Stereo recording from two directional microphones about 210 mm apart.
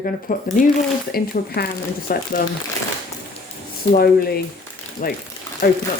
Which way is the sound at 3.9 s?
45° left (ahead or behind).